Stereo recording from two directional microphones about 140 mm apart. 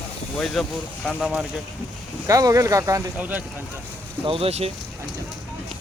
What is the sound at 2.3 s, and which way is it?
Speech, 25° right (ahead or behind).